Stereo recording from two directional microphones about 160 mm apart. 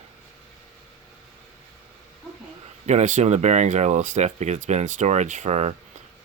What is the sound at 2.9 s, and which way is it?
Speech, 45° right (ahead or behind).